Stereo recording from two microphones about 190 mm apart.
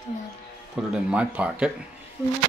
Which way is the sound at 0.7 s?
5° right (ahead or behind).